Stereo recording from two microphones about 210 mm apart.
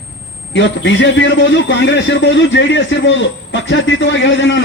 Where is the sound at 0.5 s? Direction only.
60° left (ahead or behind).